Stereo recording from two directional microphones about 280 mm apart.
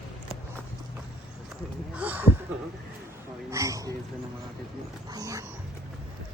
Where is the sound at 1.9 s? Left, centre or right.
Centre.